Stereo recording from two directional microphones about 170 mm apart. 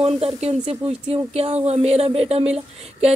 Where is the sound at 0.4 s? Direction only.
35° right (ahead or behind).